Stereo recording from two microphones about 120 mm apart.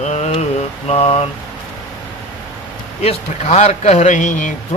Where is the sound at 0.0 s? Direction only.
65° left (ahead or behind).